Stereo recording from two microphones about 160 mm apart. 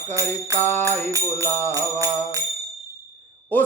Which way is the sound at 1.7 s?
20° right (ahead or behind).